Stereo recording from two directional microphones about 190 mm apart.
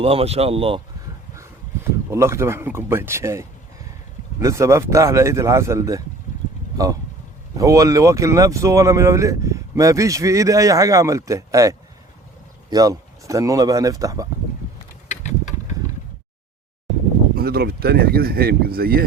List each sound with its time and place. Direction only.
0.0 s speech: 30° right (ahead or behind)
1.4 s speech: 15° right (ahead or behind)
7.5 s speech: 15° right (ahead or behind)
15.1 s a sound: 40° left (ahead or behind)
17.3 s speech: 55° right (ahead or behind)